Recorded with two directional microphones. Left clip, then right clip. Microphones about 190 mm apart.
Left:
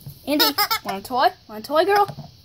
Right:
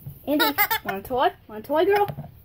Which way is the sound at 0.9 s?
10° left (ahead or behind).